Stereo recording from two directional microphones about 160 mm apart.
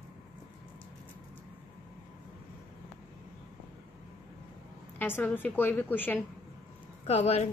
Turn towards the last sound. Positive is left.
turn(degrees=40)  # may be behind; listen again after turning